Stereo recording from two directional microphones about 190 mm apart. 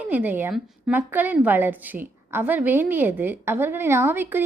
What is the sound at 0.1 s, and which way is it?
A woman's voice, 10° right (ahead or behind).